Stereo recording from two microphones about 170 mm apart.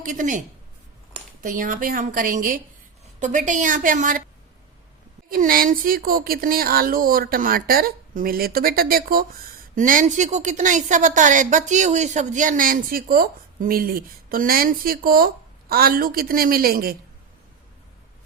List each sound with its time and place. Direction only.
0.0 s a woman's voice: 50° right (ahead or behind)
5.3 s speech: 55° right (ahead or behind)